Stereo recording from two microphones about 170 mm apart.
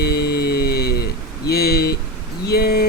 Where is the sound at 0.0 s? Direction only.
70° left (ahead or behind).